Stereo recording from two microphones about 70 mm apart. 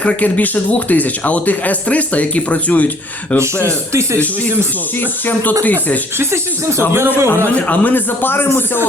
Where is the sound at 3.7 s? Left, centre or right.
Right.